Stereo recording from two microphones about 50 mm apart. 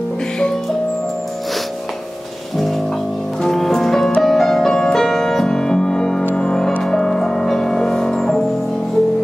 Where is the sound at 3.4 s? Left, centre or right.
Centre.